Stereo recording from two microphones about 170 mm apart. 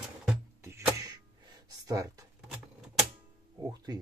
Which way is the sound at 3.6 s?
20° right (ahead or behind).